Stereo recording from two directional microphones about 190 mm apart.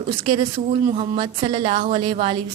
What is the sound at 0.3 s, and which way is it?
A woman's voice, 30° right (ahead or behind).